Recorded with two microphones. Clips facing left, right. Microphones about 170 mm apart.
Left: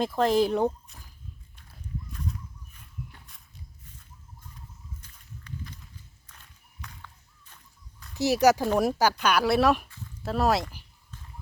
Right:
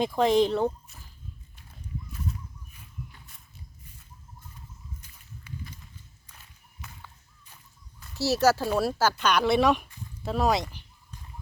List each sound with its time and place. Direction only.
0.0 s speech: centre (ahead or behind)
5.0 s walk: 10° right (ahead or behind)
6.8 s a sound: 10° right (ahead or behind)
8.1 s speech: 15° left (ahead or behind)